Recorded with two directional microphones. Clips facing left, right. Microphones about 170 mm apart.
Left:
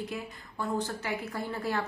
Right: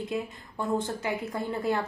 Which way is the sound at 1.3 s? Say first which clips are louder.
Right 4 dB; 20° right (ahead or behind).